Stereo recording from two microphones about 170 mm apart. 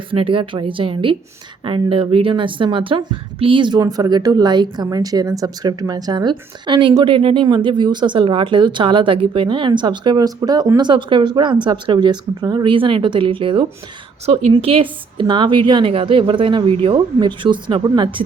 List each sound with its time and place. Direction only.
0.1 s a woman's voice: 30° right (ahead or behind)